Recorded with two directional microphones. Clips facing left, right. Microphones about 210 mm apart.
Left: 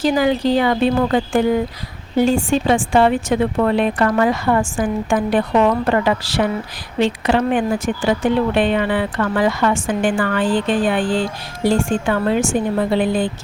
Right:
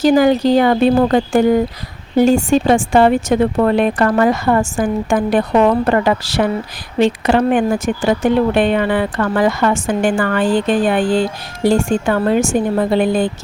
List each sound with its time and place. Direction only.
0.0 s speech: 45° right (ahead or behind)